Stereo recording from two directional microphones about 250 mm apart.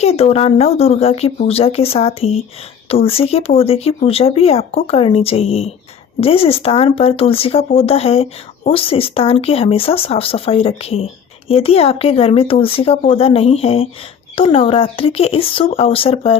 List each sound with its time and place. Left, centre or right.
0.0 s a woman's voice: left